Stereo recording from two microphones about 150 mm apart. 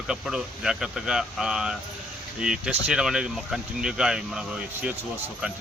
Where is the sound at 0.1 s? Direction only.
5° right (ahead or behind).